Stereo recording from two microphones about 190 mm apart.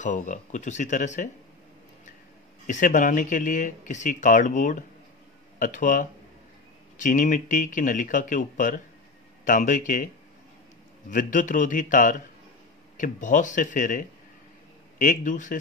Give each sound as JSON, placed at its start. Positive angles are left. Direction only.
{"t": 0.0, "sound": "speech", "side_deg": 40}
{"t": 2.6, "sound": "speech", "side_deg": 45}
{"t": 11.1, "sound": "speech", "side_deg": 45}